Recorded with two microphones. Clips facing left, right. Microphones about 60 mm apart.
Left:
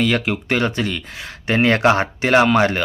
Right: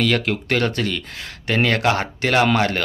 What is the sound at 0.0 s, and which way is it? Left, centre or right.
Speech, centre.